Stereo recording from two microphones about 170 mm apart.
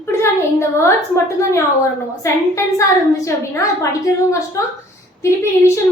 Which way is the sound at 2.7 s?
15° left (ahead or behind).